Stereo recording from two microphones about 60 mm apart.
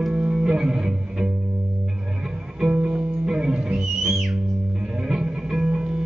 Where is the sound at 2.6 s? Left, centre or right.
Centre.